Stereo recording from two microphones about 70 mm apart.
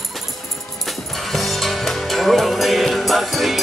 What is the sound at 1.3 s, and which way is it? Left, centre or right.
Music, centre.